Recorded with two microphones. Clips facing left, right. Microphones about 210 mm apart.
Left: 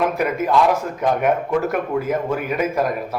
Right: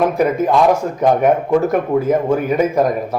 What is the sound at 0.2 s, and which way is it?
A man's voice, 35° right (ahead or behind).